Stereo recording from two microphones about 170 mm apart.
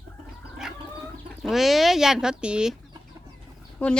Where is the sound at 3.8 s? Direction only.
5° left (ahead or behind).